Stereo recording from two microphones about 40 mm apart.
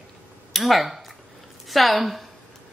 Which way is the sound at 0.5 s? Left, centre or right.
Centre.